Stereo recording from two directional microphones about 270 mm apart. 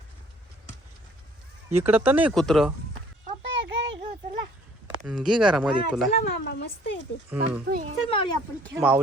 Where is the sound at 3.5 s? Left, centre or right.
Right.